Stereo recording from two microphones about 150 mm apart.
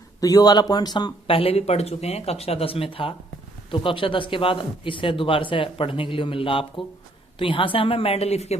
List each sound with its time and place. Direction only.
0.2 s speech: 25° left (ahead or behind); by 8.5 s 45° left (ahead or behind)